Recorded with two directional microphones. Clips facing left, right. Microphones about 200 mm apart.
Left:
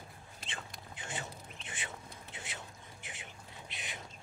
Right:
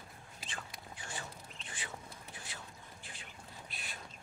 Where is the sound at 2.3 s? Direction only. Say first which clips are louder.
Left 3 dB; 20° left (ahead or behind).